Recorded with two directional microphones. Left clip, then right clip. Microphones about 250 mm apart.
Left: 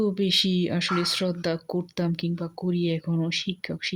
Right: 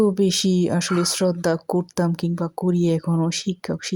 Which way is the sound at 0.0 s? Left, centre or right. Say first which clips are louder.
Right 4 dB; centre.